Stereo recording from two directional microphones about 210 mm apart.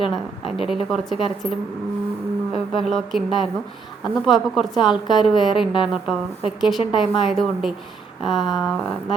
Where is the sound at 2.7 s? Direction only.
Centre (ahead or behind).